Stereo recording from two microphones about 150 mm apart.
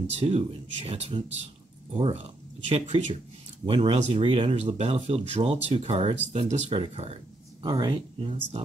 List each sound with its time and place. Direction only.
0.2 s speech: 40° right (ahead or behind)
7.6 s speech: 30° right (ahead or behind)